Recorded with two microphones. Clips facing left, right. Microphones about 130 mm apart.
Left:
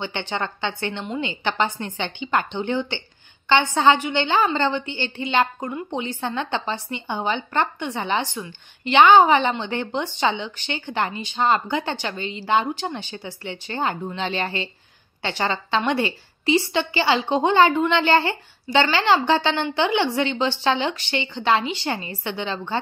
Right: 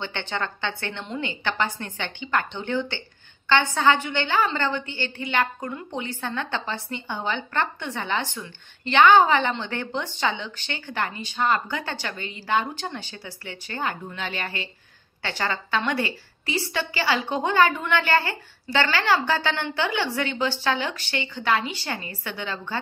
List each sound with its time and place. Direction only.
0.0 s a woman's voice: 15° left (ahead or behind)